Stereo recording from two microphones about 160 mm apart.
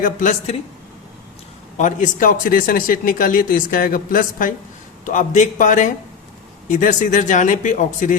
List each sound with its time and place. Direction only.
0.0 s speech: 55° left (ahead or behind)
1.8 s speech: 55° left (ahead or behind)